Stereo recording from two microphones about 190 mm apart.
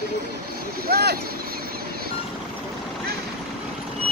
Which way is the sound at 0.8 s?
55° right (ahead or behind).